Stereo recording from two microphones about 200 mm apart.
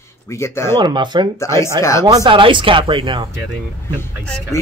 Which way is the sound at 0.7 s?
20° right (ahead or behind).